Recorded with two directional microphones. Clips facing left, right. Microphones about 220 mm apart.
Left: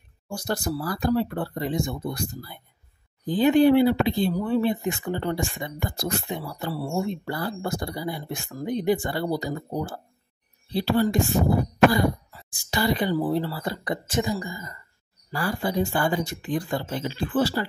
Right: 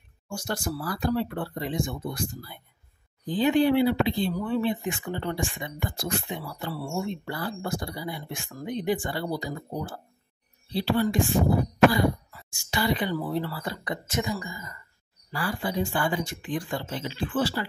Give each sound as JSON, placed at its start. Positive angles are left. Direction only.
{"t": 0.3, "sound": "speech", "side_deg": 35}
{"t": 12.3, "sound": "speech", "side_deg": 30}